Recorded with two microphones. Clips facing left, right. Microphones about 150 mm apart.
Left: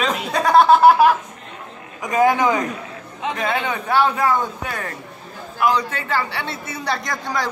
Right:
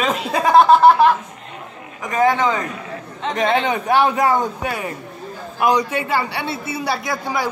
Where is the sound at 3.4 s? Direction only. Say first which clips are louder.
Right 6 dB; 25° right (ahead or behind).